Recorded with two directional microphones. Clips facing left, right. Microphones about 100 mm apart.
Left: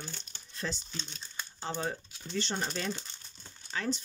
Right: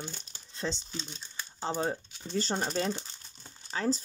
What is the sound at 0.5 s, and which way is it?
Speech, 25° right (ahead or behind).